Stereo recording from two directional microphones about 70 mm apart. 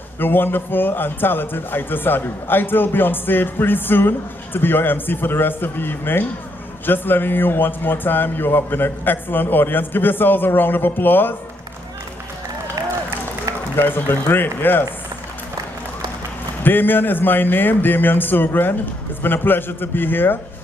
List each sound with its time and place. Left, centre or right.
0.2 s a man's voice: left
13.7 s a man's voice: left
16.6 s a man's voice: left